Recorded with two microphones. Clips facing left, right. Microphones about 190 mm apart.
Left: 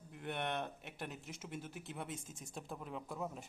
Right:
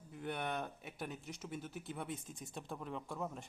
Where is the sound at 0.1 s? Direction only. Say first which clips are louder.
Even; centre (ahead or behind).